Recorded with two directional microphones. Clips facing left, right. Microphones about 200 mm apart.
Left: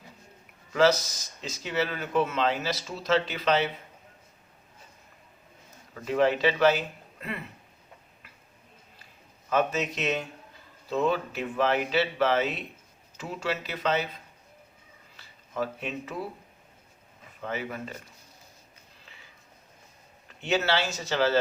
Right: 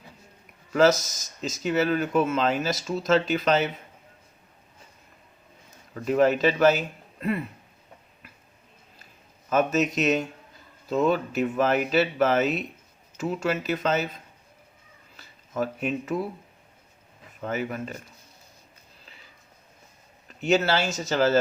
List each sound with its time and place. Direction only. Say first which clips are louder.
0.7 s speech: right 3 dB; 45° right (ahead or behind)
5.9 s speech: right 3 dB; 45° right (ahead or behind)
9.5 s speech: right 4 dB; 45° right (ahead or behind)
15.1 s a sound: right 3 dB; 45° right (ahead or behind)
17.4 s speech: right 4 dB; 45° right (ahead or behind)
20.4 s speech: right 4 dB; 40° right (ahead or behind)